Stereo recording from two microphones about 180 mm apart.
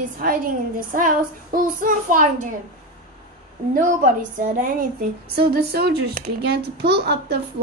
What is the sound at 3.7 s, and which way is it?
Speech, 45° right (ahead or behind).